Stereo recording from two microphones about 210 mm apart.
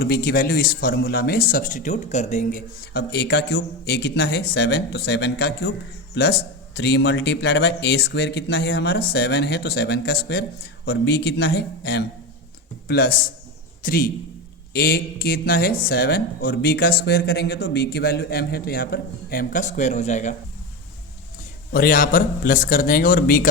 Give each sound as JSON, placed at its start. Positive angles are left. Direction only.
{"t": 0.0, "sound": "speech", "side_deg": 45}
{"t": 21.7, "sound": "a man's voice", "side_deg": 40}